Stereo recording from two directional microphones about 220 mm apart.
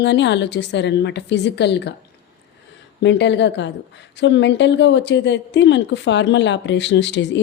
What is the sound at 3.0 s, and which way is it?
A woman's voice, 55° left (ahead or behind).